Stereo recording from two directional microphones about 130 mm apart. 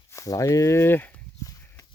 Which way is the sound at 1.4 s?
25° left (ahead or behind).